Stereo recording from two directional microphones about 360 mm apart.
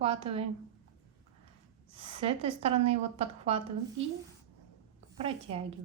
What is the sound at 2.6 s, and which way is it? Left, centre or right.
A woman's voice, centre.